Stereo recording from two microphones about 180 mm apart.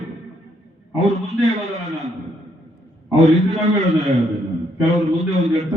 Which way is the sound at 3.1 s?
35° right (ahead or behind).